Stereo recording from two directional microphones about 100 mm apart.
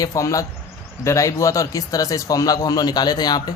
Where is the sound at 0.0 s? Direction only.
35° left (ahead or behind).